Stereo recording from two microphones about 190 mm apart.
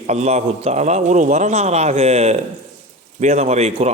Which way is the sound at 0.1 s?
35° right (ahead or behind).